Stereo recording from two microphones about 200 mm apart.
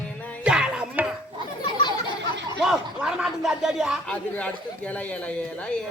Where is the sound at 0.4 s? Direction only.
5° right (ahead or behind).